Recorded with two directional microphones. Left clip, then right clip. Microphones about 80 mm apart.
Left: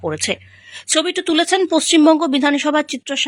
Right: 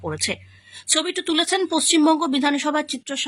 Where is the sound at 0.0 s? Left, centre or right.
Left.